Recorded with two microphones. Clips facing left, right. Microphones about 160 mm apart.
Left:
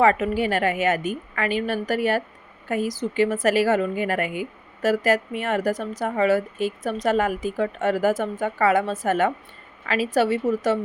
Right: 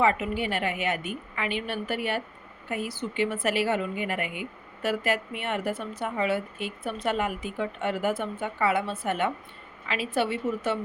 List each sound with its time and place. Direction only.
0.0 s a woman's voice: 45° left (ahead or behind)